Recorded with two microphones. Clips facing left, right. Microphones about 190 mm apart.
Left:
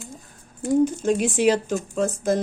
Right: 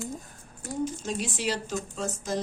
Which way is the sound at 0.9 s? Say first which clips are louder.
Left 10 dB; 55° left (ahead or behind).